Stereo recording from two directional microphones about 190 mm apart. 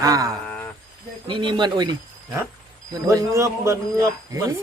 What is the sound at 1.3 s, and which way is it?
Speech, 25° right (ahead or behind).